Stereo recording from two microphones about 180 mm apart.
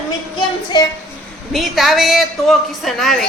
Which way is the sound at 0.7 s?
25° left (ahead or behind).